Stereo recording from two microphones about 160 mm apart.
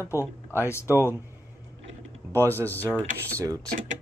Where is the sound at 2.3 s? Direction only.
15° left (ahead or behind).